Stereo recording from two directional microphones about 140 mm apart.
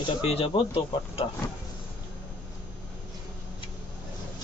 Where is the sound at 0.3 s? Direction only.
40° left (ahead or behind).